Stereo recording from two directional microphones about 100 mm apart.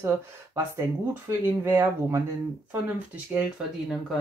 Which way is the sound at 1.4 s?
25° right (ahead or behind).